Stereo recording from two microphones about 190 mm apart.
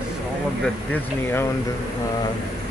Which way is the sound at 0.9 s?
10° left (ahead or behind).